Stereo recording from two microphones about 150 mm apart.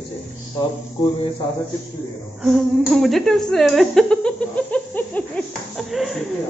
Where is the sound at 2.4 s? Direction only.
Centre (ahead or behind).